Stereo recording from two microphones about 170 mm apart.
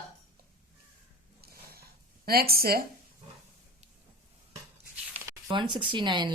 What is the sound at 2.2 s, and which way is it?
Speech, 65° right (ahead or behind).